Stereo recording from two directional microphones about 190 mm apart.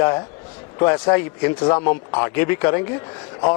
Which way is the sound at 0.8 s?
20° left (ahead or behind).